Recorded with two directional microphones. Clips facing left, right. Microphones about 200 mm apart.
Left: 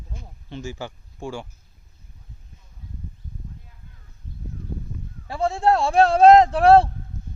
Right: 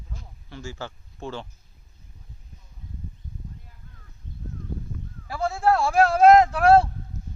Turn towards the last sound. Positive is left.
turn(degrees=30)  # may be behind; listen again after turning